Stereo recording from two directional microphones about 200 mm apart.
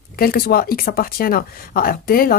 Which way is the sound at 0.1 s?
50° left (ahead or behind).